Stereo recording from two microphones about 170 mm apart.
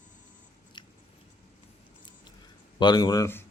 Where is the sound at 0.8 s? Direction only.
30° left (ahead or behind).